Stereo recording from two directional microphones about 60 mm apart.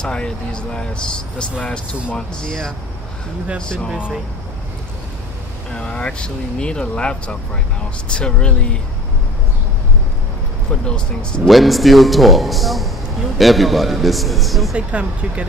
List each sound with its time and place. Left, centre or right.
0.0 s speech: centre
2.1 s speech: centre
5.7 s speech: centre
10.7 s speech: centre
11.4 s a man's voice: centre
14.8 s speech: centre